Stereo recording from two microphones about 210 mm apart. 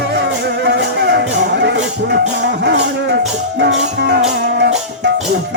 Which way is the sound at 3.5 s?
55° right (ahead or behind).